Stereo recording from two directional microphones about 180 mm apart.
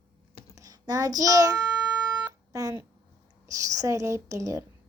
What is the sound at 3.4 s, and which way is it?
A woman's voice, 20° right (ahead or behind).